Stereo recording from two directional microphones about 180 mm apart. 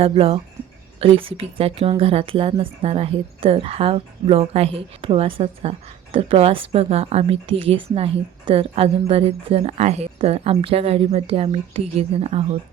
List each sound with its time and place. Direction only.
0.0 s speech: 30° right (ahead or behind)